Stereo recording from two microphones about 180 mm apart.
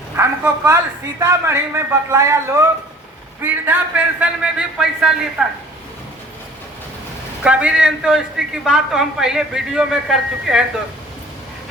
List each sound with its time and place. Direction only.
0.2 s a sound: 15° right (ahead or behind)
1.2 s a man's voice: 15° right (ahead or behind)
7.4 s a man's voice: 5° right (ahead or behind)